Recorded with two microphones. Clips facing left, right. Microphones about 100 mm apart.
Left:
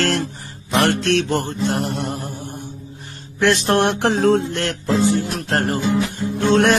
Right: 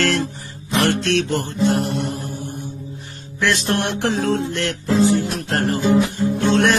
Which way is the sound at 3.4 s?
50° left (ahead or behind).